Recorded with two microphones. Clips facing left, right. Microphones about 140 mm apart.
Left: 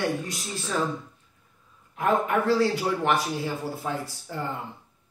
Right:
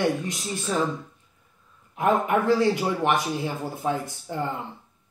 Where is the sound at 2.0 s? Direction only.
20° right (ahead or behind).